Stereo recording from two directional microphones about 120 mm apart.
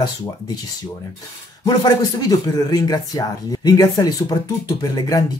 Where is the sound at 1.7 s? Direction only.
35° left (ahead or behind).